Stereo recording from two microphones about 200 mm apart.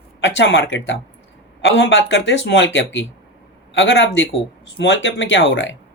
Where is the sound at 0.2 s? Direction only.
65° left (ahead or behind).